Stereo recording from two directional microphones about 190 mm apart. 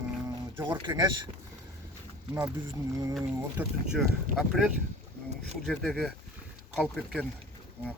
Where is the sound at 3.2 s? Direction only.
5° right (ahead or behind).